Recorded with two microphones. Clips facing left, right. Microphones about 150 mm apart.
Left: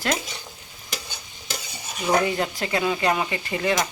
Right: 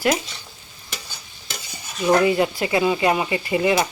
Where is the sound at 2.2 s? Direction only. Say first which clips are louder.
Right 6 dB; 10° right (ahead or behind).